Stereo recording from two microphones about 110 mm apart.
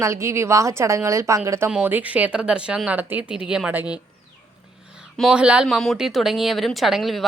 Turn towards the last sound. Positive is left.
turn(degrees=0)  # may be behind; listen again after turning